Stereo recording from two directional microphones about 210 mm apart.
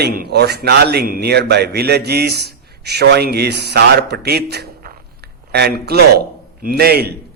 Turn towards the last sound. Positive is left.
turn(degrees=-50)  # may be behind; listen again after turning